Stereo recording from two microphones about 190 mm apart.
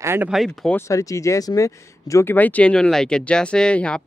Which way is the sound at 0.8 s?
15° left (ahead or behind).